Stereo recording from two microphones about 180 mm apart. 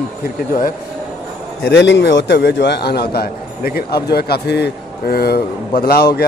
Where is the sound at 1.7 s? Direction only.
80° left.